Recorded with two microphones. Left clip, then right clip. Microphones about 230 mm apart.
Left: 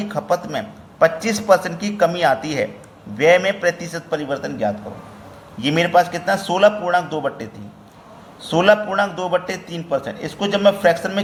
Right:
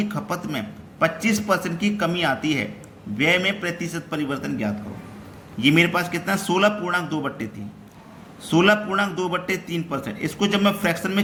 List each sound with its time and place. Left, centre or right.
0.0 s a man's voice: centre
8.4 s a man's voice: centre